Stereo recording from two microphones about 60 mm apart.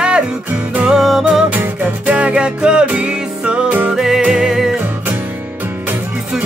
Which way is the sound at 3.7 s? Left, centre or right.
Right.